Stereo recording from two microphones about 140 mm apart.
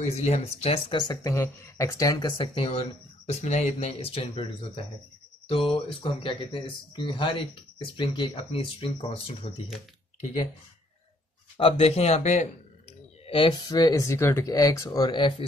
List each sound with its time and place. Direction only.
0.0 s speech: 50° left (ahead or behind)
11.5 s speech: 45° left (ahead or behind)
13.3 s speech: 35° left (ahead or behind)